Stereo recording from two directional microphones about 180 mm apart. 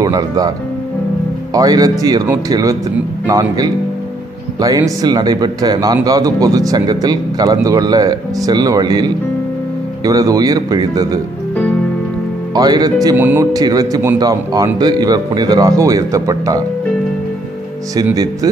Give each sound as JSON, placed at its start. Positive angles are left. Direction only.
{"t": 0.0, "sound": "speech", "side_deg": -20}
{"t": 1.5, "sound": "speech", "side_deg": -20}
{"t": 12.5, "sound": "speech", "side_deg": -20}
{"t": 13.1, "sound": "speech", "side_deg": -10}
{"t": 18.1, "sound": "speech", "side_deg": -20}